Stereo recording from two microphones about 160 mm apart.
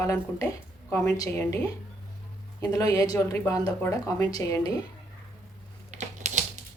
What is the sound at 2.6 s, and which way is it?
Speech, 20° left (ahead or behind).